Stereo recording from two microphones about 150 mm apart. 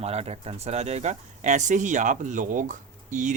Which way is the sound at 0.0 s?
45° right (ahead or behind).